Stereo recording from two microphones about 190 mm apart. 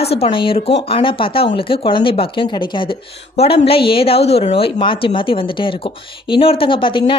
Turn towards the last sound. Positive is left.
turn(degrees=25)  # may be behind; listen again after turning